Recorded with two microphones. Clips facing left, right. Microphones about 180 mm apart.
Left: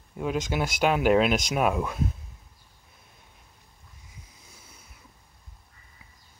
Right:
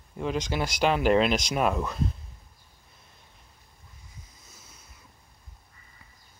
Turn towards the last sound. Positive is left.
turn(degrees=10)  # may be behind; listen again after turning